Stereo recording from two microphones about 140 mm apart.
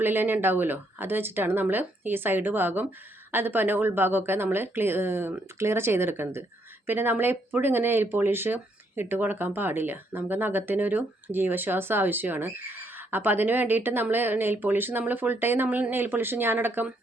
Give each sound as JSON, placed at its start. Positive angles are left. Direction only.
{"t": 0.0, "sound": "speech", "side_deg": -15}